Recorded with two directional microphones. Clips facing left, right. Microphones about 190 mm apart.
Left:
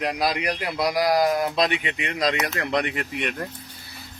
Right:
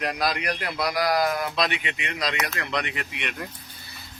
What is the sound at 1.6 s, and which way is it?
Speech, 35° left (ahead or behind).